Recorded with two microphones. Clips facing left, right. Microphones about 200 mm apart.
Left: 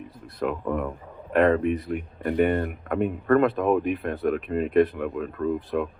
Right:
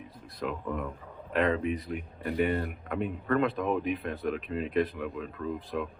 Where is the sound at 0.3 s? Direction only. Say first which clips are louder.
Left 7 dB; 55° left (ahead or behind).